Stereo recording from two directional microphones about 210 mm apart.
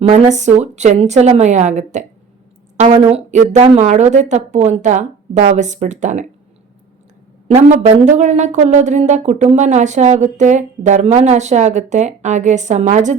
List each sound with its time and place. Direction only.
0.0 s a woman's voice: 35° right (ahead or behind)
7.4 s a woman's voice: 30° right (ahead or behind)